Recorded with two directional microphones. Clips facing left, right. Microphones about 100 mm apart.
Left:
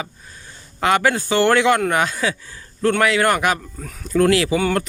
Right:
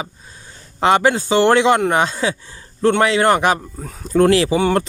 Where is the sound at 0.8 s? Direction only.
25° right (ahead or behind).